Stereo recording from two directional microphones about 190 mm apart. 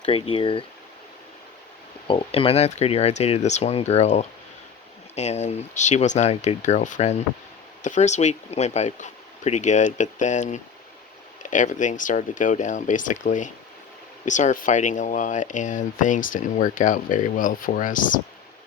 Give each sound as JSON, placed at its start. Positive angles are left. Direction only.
{"t": 0.0, "sound": "speech", "side_deg": 30}
{"t": 2.0, "sound": "speech", "side_deg": 25}